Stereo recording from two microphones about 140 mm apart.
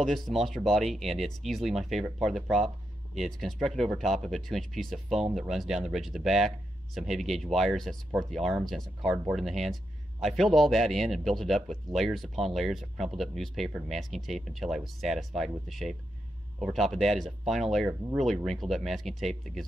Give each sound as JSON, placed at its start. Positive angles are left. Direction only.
{"t": 0.0, "sound": "a man's voice", "side_deg": 0}